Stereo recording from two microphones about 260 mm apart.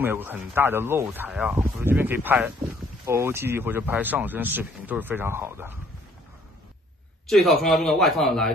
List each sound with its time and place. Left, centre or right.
0.0 s speech: centre
7.2 s speech: centre